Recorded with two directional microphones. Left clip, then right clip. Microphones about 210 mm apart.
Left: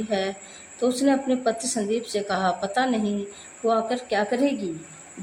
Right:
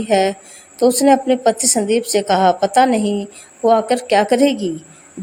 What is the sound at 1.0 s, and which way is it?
A woman's voice, 30° right (ahead or behind).